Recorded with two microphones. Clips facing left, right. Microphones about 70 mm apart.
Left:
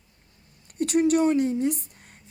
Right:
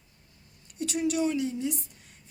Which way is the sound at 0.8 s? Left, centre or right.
Left.